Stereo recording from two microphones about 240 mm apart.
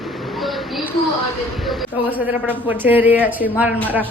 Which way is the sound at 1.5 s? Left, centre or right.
Centre.